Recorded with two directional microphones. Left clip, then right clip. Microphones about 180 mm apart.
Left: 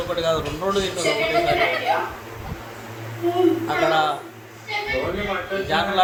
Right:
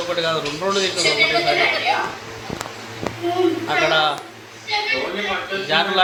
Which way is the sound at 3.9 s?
15° right (ahead or behind).